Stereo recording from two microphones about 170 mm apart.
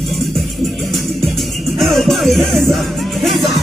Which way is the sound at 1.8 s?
Centre (ahead or behind).